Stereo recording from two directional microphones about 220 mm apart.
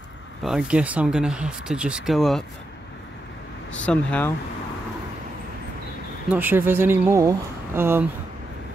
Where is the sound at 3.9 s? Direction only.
5° left (ahead or behind).